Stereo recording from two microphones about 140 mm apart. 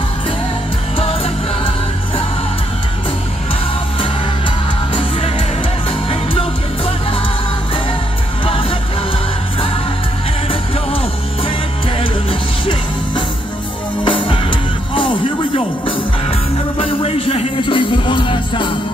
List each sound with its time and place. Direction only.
0.9 s music: 45° left (ahead or behind)
5.9 s music: 40° left (ahead or behind)
8.5 s music: 40° left (ahead or behind)
12.0 s music: 35° left (ahead or behind)